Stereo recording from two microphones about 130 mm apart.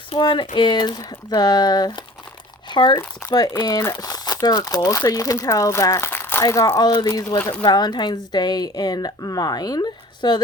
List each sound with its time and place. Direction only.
0.1 s speech: 40° left (ahead or behind)